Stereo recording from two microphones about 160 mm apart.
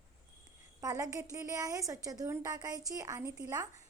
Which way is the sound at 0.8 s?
20° right (ahead or behind).